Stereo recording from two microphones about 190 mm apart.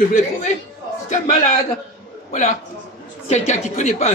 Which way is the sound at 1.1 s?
40° left (ahead or behind).